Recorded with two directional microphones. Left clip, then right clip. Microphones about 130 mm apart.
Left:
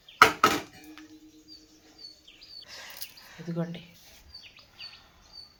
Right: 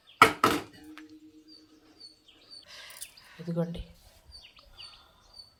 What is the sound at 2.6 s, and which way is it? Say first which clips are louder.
Bird: left 3 dB; 35° left (ahead or behind).